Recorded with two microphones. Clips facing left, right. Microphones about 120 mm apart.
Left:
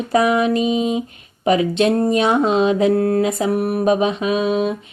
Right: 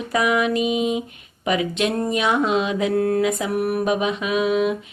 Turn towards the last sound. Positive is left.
turn(degrees=30)  # may be behind; listen again after turning